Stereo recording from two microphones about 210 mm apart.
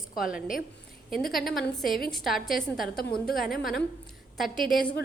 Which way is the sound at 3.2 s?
45° left (ahead or behind).